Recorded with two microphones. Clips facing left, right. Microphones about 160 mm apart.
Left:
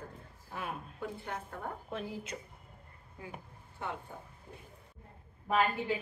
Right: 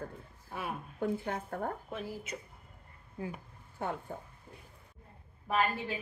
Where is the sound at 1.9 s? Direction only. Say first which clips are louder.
Even; 5° right (ahead or behind).